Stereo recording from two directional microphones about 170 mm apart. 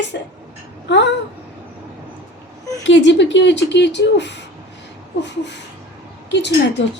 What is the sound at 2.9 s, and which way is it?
Speech, 90° left.